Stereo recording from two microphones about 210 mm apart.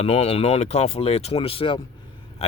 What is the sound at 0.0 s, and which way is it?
Speech, 30° left (ahead or behind).